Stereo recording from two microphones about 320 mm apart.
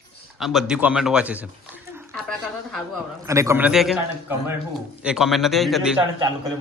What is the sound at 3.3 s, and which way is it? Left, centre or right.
A man's voice, centre.